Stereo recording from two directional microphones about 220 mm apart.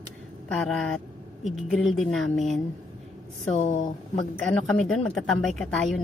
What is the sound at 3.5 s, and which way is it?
Speech, 30° left (ahead or behind).